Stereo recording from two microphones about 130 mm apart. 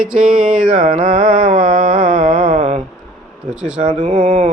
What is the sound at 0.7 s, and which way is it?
Music, 90° right.